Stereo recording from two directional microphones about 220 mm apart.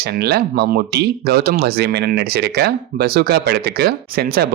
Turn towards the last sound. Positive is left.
turn(degrees=-45)  # may be behind; listen again after turning